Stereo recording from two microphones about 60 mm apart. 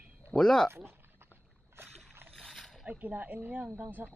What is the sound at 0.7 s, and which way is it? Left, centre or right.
Speech, right.